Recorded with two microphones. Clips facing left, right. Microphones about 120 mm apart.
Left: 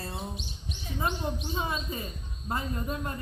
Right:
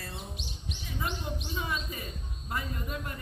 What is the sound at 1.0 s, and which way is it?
A woman's voice, 30° left (ahead or behind).